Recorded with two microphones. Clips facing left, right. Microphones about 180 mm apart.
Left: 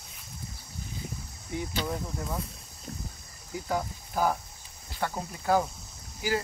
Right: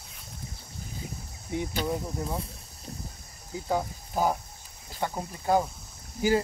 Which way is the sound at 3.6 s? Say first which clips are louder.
Right 3 dB; 25° right (ahead or behind).